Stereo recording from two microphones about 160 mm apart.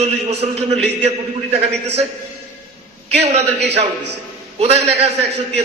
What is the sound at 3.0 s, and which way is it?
Speech, 40° right (ahead or behind).